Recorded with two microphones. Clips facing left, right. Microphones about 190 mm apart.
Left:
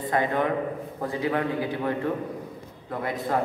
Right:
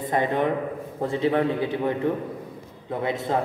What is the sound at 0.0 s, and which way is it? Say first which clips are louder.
A man's voice: right 2 dB; 20° right (ahead or behind).